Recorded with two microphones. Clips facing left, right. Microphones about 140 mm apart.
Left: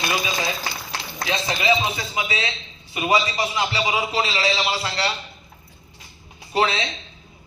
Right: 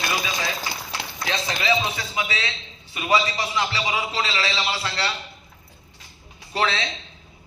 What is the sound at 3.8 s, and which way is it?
A man's voice, 30° left (ahead or behind).